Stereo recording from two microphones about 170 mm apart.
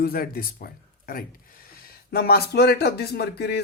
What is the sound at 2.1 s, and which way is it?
Speech, 65° left (ahead or behind).